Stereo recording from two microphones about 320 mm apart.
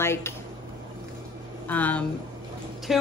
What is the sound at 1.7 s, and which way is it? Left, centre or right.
A woman's voice, centre.